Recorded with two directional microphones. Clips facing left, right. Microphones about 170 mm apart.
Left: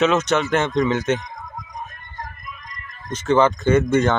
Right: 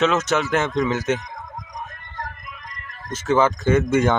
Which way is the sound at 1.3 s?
70° right (ahead or behind).